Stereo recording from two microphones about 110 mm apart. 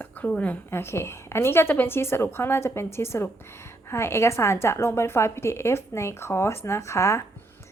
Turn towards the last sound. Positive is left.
turn(degrees=25)  # may be behind; listen again after turning